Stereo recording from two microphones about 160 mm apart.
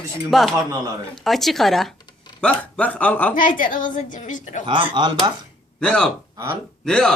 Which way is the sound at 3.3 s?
55° left (ahead or behind).